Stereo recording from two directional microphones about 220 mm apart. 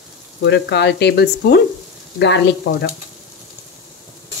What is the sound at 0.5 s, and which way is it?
Speech, 50° left (ahead or behind).